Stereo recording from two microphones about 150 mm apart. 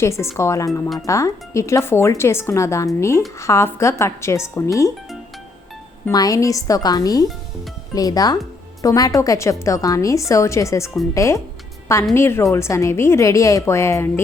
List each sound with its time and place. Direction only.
0.0 s speech: 20° left (ahead or behind)
6.1 s speech: 25° left (ahead or behind)